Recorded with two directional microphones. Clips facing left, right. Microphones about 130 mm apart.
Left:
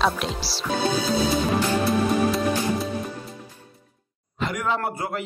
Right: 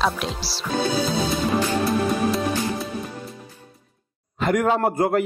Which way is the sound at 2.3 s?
Centre (ahead or behind).